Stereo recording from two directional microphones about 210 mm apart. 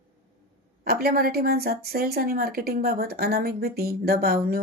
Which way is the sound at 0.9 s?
45° right (ahead or behind).